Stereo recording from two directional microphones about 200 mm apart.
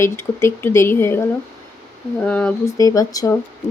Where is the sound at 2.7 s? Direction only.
15° left (ahead or behind).